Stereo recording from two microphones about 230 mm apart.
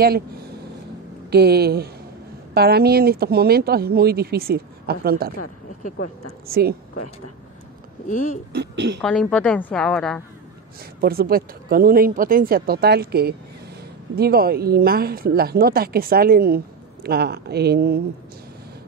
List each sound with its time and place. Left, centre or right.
1.3 s speech: right
6.4 s speech: right
8.1 s speech: left
8.5 s speech: right
9.0 s a woman's voice: centre
11.0 s speech: right